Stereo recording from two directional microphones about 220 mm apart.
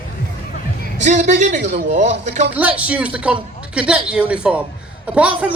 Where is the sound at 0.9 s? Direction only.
35° right (ahead or behind).